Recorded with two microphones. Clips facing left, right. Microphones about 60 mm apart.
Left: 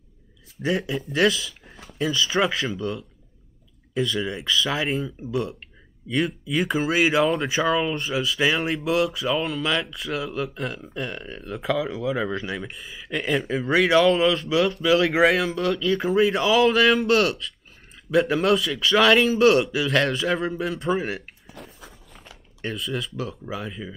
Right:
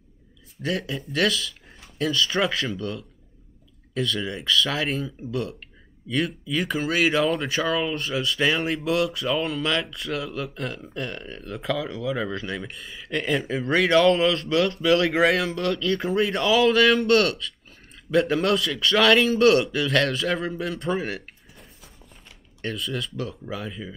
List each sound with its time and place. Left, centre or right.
0.6 s speech: centre
21.5 s a sound: left
22.6 s speech: centre